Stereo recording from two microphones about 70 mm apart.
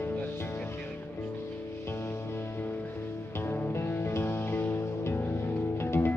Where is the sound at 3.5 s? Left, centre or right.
Left.